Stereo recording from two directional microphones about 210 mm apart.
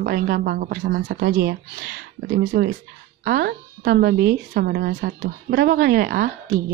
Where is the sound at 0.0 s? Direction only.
40° right (ahead or behind).